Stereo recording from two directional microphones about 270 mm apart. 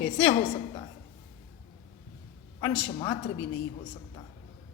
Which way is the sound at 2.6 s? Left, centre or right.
Centre.